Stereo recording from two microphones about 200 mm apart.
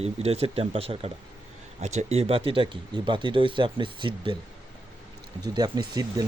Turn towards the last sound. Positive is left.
turn(degrees=-20)  # may be behind; listen again after turning